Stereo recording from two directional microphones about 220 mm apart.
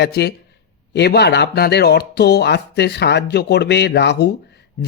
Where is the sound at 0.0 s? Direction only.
45° left (ahead or behind).